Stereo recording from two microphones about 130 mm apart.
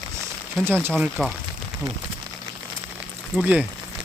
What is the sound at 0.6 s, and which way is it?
Speech, 15° right (ahead or behind).